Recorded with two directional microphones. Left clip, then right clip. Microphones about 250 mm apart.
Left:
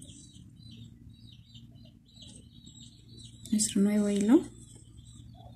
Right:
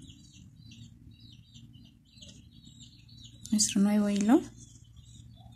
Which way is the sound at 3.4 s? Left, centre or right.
Right.